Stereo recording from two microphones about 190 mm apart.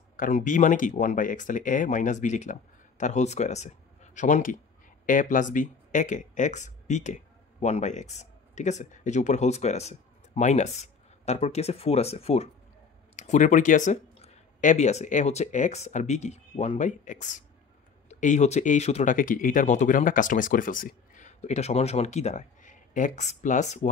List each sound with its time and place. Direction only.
0.1 s speech: 45° left (ahead or behind)